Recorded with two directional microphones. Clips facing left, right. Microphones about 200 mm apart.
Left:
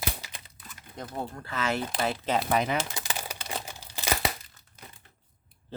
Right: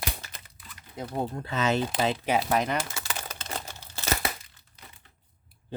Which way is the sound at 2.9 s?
15° left (ahead or behind).